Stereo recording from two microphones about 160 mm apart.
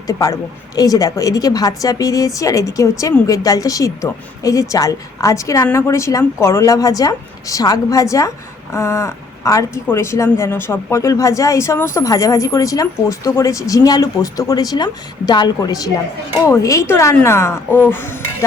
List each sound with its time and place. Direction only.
0.1 s a woman's voice: 20° left (ahead or behind)